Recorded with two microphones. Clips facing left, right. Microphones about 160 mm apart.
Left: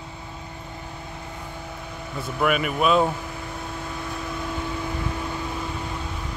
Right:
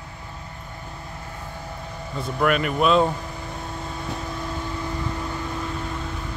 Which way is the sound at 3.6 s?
Centre (ahead or behind).